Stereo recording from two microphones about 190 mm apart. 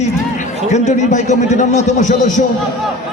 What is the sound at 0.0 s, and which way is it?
A man's voice, 40° left (ahead or behind).